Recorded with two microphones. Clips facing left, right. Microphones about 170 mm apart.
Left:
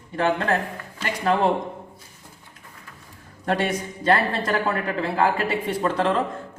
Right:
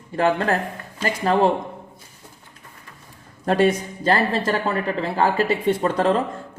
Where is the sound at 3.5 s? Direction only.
30° right (ahead or behind).